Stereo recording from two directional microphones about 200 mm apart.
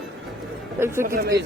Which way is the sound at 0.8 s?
10° right (ahead or behind).